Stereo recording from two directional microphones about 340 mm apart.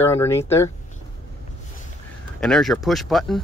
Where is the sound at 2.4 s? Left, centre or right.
Centre.